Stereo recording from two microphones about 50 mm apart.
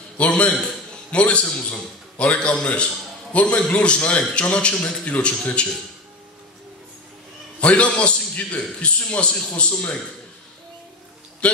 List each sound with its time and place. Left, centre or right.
0.2 s a man's voice: left
7.6 s a man's voice: left
11.4 s a man's voice: left